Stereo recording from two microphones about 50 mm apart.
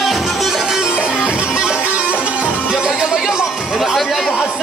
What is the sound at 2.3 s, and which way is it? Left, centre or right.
Music, right.